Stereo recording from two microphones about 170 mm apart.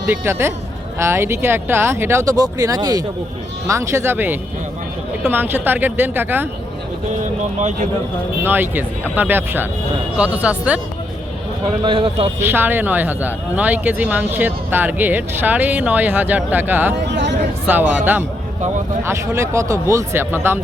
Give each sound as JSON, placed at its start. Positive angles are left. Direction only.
{"t": 0.1, "sound": "speech", "side_deg": -15}
{"t": 7.2, "sound": "speech", "side_deg": -45}
{"t": 8.4, "sound": "speech", "side_deg": -10}
{"t": 11.8, "sound": "speech", "side_deg": -30}
{"t": 12.4, "sound": "speech", "side_deg": -10}
{"t": 17.1, "sound": "speech", "side_deg": -90}
{"t": 17.7, "sound": "speech", "side_deg": -10}